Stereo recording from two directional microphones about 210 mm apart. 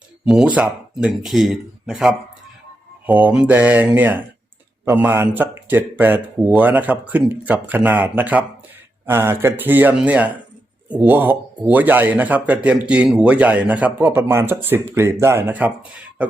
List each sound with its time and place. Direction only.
0.3 s speech: 5° right (ahead or behind)